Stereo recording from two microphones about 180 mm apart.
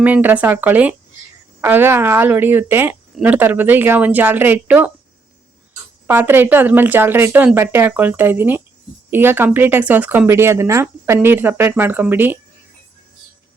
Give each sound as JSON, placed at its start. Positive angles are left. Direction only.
{"t": 0.0, "sound": "speech", "side_deg": -10}
{"t": 6.1, "sound": "speech", "side_deg": -10}